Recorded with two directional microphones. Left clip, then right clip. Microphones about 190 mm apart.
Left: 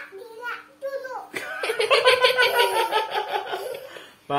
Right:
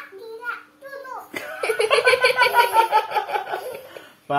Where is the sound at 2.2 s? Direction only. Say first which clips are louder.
Right 2 dB; 40° left (ahead or behind).